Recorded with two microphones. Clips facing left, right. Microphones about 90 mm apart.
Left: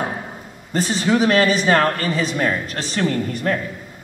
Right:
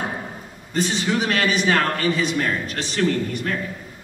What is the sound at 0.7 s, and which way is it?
A man's voice, 40° left (ahead or behind).